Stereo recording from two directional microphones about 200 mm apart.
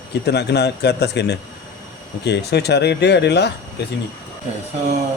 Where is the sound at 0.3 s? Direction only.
55° left (ahead or behind).